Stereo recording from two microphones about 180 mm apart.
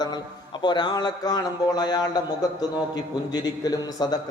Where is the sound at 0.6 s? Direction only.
25° left (ahead or behind).